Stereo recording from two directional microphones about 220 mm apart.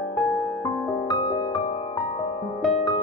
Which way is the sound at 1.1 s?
20° left (ahead or behind).